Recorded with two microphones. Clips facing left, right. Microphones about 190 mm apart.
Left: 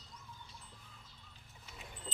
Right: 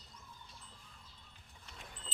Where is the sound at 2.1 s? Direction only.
20° left (ahead or behind).